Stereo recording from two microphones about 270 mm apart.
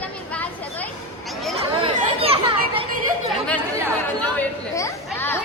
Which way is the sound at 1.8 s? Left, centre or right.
Right.